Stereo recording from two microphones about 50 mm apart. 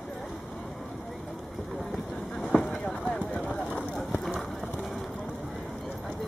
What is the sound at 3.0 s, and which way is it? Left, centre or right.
Clip-clop, centre.